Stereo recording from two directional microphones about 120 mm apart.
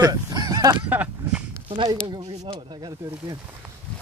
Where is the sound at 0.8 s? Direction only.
15° right (ahead or behind).